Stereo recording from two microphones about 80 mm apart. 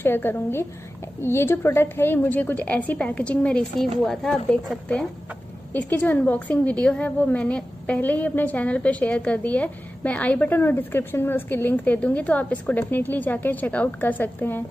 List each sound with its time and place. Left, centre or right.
0.0 s a woman's voice: left; by 4.6 s centre
5.7 s a woman's voice: left